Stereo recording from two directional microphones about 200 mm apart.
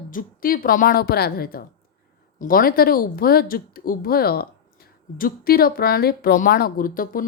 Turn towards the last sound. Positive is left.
turn(degrees=45)  # may be behind; listen again after turning